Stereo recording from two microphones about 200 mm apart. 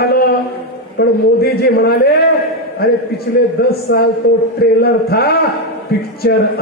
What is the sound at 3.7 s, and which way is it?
A man's voice, 50° left (ahead or behind).